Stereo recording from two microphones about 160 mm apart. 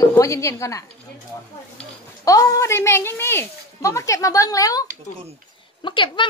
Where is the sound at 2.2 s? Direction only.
20° left (ahead or behind).